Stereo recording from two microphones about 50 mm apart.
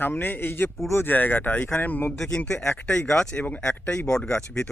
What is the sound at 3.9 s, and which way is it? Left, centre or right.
Speech, centre.